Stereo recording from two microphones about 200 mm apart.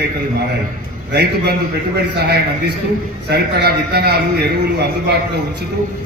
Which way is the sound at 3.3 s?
55° right (ahead or behind).